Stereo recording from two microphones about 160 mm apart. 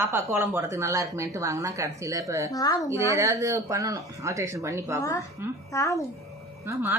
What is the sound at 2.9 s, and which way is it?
Speech, 20° right (ahead or behind).